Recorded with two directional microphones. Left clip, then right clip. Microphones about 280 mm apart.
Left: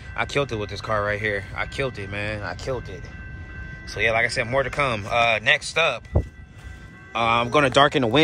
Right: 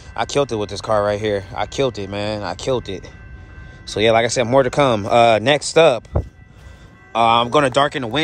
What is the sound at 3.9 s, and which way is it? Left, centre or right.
Speech, centre.